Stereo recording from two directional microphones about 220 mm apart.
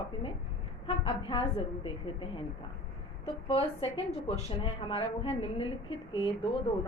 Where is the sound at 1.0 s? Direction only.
25° left (ahead or behind).